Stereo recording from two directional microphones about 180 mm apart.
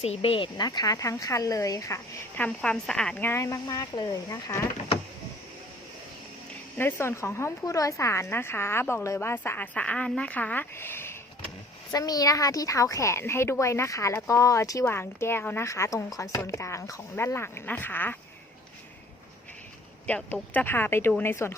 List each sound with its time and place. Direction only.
0.0 s speech: 35° left (ahead or behind)
2.4 s a woman's voice: 5° left (ahead or behind)
6.7 s a woman's voice: 15° left (ahead or behind)
20.1 s a woman's voice: 10° left (ahead or behind)